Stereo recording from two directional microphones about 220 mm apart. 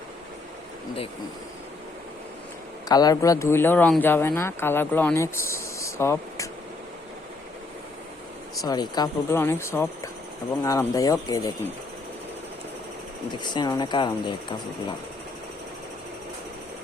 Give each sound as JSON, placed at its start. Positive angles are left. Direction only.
{"t": 2.9, "sound": "speech", "side_deg": 15}
{"t": 8.6, "sound": "speech", "side_deg": 20}
{"t": 13.4, "sound": "speech", "side_deg": 20}